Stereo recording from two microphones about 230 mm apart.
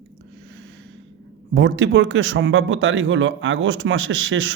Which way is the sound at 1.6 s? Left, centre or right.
Right.